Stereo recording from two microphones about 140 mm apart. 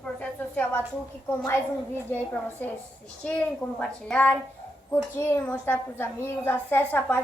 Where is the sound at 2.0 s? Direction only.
15° left (ahead or behind).